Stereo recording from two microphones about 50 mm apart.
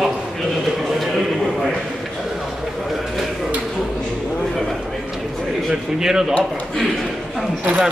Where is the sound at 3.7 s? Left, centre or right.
Centre.